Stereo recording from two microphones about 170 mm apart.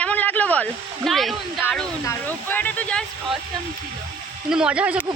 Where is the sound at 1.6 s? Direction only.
15° left (ahead or behind).